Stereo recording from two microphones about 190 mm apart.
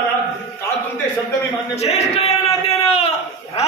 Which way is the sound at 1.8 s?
35° left (ahead or behind).